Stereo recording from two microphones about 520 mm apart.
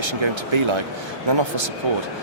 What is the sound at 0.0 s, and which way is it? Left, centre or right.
Speech, right.